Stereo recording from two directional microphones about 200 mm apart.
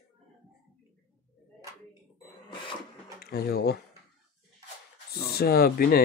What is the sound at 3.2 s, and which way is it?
Speech, 50° left (ahead or behind).